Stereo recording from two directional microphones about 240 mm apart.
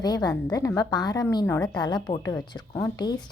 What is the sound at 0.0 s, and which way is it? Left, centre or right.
A woman's voice, centre.